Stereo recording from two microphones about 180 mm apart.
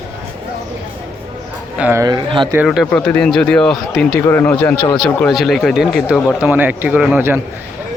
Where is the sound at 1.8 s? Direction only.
15° right (ahead or behind).